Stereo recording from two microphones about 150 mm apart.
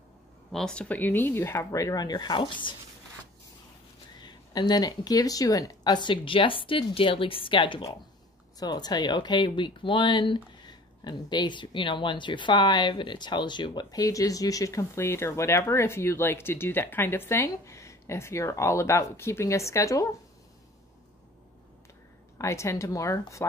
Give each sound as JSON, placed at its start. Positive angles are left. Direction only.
{"t": 0.5, "sound": "speech", "side_deg": 5}
{"t": 4.2, "sound": "speech", "side_deg": 30}
{"t": 22.4, "sound": "speech", "side_deg": 20}